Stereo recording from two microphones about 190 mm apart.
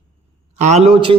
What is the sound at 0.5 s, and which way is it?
Speech, 35° right (ahead or behind).